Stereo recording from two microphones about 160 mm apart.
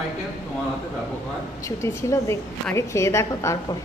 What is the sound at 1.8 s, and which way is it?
A woman's voice, 15° left (ahead or behind).